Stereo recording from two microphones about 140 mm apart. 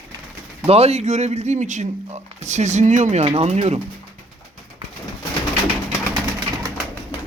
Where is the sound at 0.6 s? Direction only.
45° right (ahead or behind).